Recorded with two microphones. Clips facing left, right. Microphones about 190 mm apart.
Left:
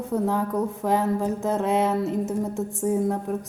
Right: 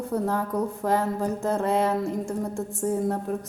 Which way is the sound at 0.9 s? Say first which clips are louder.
Left 2 dB; 15° left (ahead or behind).